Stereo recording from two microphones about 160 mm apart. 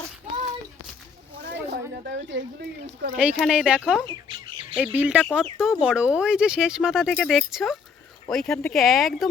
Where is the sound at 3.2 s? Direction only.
5° right (ahead or behind).